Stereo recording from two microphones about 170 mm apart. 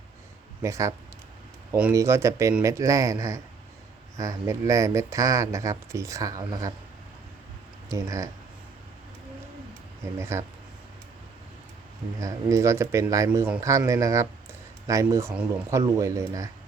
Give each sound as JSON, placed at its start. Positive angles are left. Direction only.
{"t": 0.6, "sound": "speech", "side_deg": -20}
{"t": 7.9, "sound": "speech", "side_deg": -20}
{"t": 10.2, "sound": "speech", "side_deg": -15}
{"t": 12.2, "sound": "speech", "side_deg": -20}